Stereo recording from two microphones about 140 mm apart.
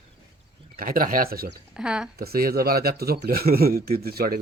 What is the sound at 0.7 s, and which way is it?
Speech, 85° right.